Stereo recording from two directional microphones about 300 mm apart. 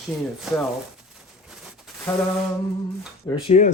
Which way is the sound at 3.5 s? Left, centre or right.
Left.